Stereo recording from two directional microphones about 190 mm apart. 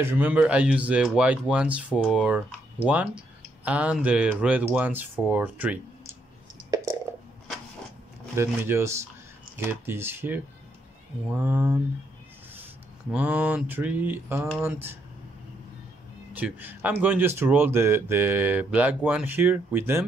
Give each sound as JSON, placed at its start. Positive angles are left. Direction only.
{"t": 0.0, "sound": "speech", "side_deg": -10}
{"t": 8.4, "sound": "speech", "side_deg": -15}
{"t": 13.1, "sound": "speech", "side_deg": -5}
{"t": 16.3, "sound": "a man's voice", "side_deg": -10}